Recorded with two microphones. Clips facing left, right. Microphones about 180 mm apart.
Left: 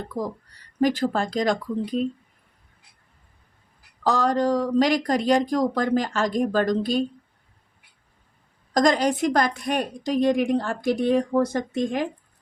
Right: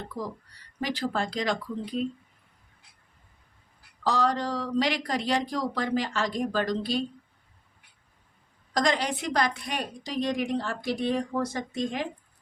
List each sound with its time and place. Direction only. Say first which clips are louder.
0.1 s a woman's voice: left 7 dB; 45° left (ahead or behind)
4.0 s a woman's voice: left 5 dB; 45° left (ahead or behind)
8.7 s a woman's voice: left 7 dB; 45° left (ahead or behind)